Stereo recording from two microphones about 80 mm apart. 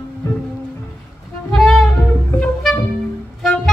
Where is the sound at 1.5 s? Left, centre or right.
Centre.